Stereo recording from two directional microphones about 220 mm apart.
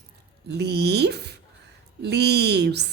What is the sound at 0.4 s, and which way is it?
A woman's voice, 50° right (ahead or behind).